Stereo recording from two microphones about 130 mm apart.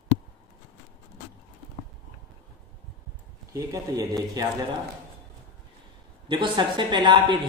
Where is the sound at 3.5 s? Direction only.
25° right (ahead or behind).